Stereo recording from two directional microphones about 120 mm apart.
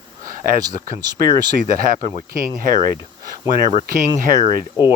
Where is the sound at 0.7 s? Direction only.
35° right (ahead or behind).